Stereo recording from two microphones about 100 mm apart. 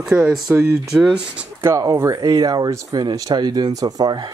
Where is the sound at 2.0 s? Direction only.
35° right (ahead or behind).